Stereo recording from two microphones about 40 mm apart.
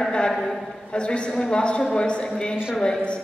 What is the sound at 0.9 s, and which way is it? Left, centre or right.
A man's voice, left.